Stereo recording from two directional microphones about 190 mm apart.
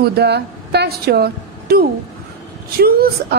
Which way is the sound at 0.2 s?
60° right (ahead or behind).